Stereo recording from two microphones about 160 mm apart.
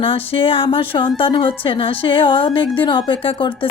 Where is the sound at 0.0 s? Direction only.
35° left (ahead or behind).